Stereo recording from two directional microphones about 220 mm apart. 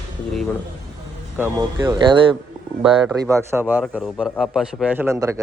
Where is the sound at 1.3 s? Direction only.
15° right (ahead or behind).